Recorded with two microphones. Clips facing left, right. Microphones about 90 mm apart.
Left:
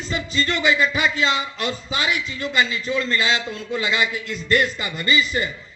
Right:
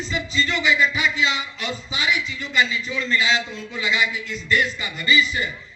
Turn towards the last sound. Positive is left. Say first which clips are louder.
# even
turn(degrees=40)  # may be behind; listen again after turning